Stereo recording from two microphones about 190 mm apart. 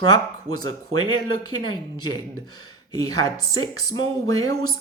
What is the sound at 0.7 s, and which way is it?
Speech, 90° right.